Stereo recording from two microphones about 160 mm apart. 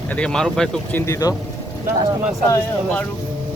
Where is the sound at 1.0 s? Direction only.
20° left (ahead or behind).